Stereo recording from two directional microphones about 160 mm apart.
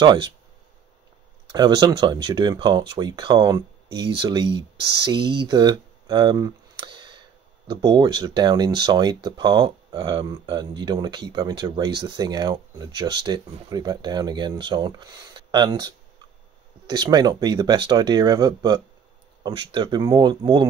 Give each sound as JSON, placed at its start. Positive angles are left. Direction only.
{"t": 0.0, "sound": "speech", "side_deg": -25}
{"t": 1.5, "sound": "speech", "side_deg": -25}
{"t": 16.9, "sound": "speech", "side_deg": -25}